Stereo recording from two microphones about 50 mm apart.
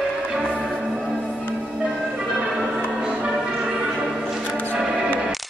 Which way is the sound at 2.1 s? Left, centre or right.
Centre.